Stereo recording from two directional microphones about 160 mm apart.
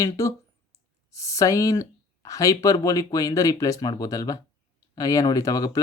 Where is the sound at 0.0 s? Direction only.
20° left (ahead or behind).